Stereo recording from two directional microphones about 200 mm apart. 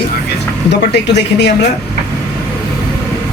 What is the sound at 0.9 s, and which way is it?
Speech, 60° left (ahead or behind).